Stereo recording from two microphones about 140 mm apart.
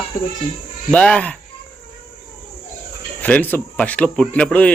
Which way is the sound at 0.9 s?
5° left (ahead or behind).